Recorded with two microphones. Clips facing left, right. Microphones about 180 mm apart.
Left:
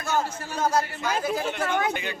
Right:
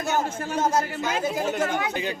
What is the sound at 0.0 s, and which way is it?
A man's voice, 20° right (ahead or behind).